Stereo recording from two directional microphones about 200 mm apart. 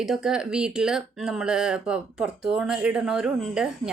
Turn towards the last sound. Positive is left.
turn(degrees=-5)  # may be behind; listen again after turning